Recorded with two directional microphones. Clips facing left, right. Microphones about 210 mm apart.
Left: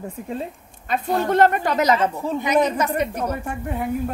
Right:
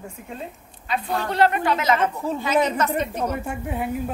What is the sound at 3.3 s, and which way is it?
Speech, 10° right (ahead or behind).